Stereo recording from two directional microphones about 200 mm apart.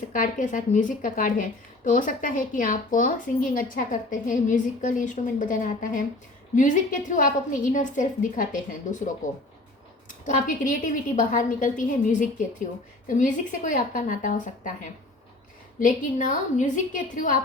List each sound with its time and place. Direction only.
0.1 s a woman's voice: 40° left (ahead or behind)
15.8 s a woman's voice: 40° left (ahead or behind)